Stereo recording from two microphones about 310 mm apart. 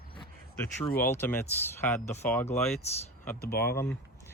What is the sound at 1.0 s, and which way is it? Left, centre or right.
Speech, centre.